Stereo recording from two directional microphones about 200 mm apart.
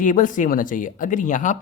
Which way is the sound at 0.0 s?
40° left (ahead or behind).